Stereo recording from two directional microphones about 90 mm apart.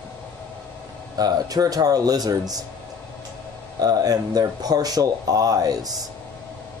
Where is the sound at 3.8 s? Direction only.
45° right (ahead or behind).